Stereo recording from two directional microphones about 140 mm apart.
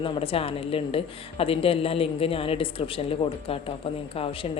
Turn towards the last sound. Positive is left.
turn(degrees=45)  # may be behind; listen again after turning